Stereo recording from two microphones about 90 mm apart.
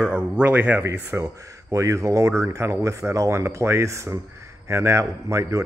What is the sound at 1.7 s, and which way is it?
A man's voice, 35° right (ahead or behind).